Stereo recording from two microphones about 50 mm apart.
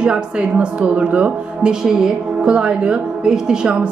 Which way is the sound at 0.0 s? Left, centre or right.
Centre.